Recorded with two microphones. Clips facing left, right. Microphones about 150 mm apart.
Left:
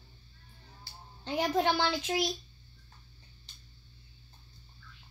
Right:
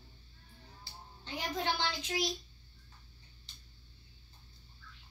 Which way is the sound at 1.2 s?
60° left (ahead or behind).